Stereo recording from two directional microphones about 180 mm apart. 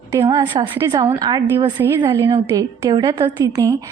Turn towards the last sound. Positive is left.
turn(degrees=-20)  # may be behind; listen again after turning